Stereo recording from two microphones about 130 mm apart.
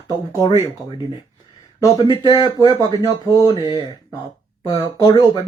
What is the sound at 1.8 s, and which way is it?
Speech, 30° left (ahead or behind).